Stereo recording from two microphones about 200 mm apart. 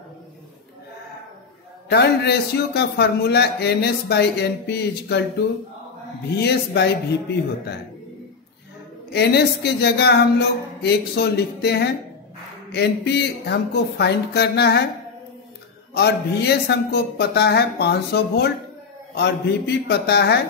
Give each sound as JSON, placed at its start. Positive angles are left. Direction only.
{"t": 1.9, "sound": "a man's voice", "side_deg": 55}
{"t": 6.3, "sound": "speech", "side_deg": 55}
{"t": 9.1, "sound": "a man's voice", "side_deg": 55}
{"t": 15.9, "sound": "a man's voice", "side_deg": 55}